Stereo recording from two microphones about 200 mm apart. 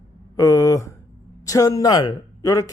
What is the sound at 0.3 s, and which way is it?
Speech, 15° left (ahead or behind).